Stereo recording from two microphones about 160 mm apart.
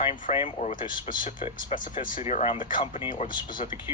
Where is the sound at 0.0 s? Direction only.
35° left (ahead or behind).